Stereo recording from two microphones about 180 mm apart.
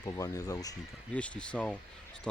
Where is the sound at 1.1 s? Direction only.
5° left (ahead or behind).